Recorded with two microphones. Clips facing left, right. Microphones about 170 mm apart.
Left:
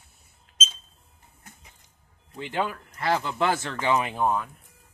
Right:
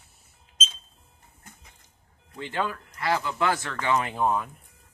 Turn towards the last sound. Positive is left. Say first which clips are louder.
# even
turn(degrees=0)  # may be behind; listen again after turning